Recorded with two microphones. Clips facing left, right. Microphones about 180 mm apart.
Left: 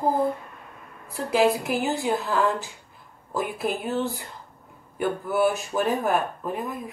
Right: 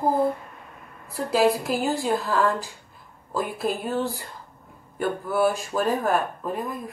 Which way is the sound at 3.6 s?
20° left (ahead or behind).